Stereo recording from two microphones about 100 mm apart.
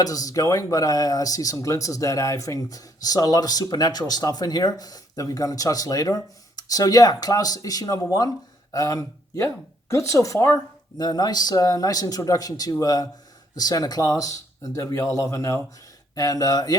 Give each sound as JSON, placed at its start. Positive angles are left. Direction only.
{"t": 0.0, "sound": "speech", "side_deg": 35}
{"t": 10.9, "sound": "speech", "side_deg": 40}